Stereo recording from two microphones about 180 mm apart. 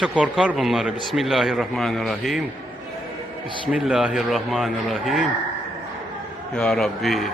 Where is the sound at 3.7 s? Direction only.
5° right (ahead or behind).